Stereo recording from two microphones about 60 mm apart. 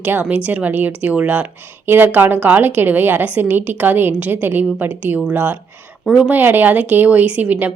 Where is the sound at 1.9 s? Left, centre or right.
Right.